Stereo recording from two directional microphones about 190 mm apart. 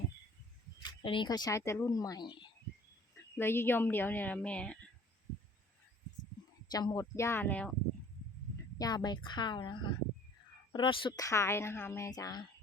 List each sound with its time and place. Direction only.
0.8 s speech: 25° left (ahead or behind)
3.3 s speech: 10° left (ahead or behind)
6.7 s speech: 20° left (ahead or behind)
8.8 s speech: 20° left (ahead or behind)